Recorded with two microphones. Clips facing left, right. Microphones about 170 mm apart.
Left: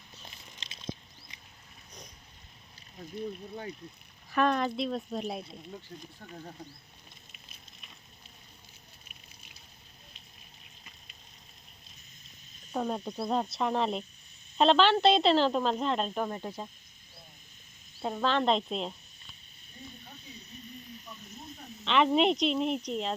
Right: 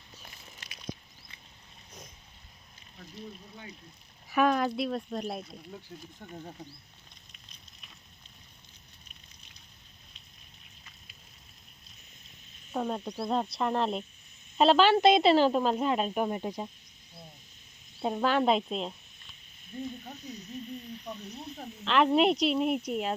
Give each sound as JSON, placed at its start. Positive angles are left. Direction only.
{"t": 0.3, "sound": "biting", "side_deg": 25}
{"t": 4.3, "sound": "speech", "side_deg": -5}
{"t": 7.3, "sound": "fire", "side_deg": 5}
{"t": 12.7, "sound": "speech", "side_deg": 0}
{"t": 18.0, "sound": "speech", "side_deg": -10}
{"t": 20.7, "sound": "snake", "side_deg": -45}
{"t": 21.8, "sound": "speech", "side_deg": 0}